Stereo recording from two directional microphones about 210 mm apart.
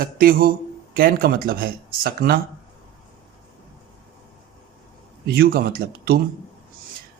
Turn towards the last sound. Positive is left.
turn(degrees=-45)  # may be behind; listen again after turning